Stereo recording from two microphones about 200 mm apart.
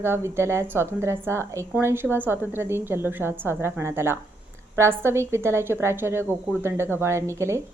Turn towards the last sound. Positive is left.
turn(degrees=-15)  # may be behind; listen again after turning